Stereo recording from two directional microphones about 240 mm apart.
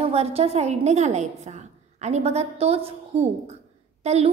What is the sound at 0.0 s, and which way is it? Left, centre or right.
A woman's voice, right.